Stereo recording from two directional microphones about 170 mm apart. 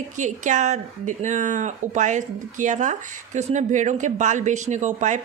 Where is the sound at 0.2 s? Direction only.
45° right (ahead or behind).